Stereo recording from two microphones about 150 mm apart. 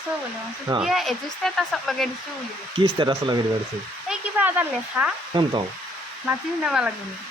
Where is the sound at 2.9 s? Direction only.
30° right (ahead or behind).